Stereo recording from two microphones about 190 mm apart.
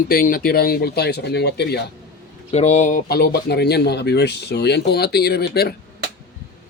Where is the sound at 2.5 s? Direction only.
35° left (ahead or behind); by 5.7 s 55° left (ahead or behind).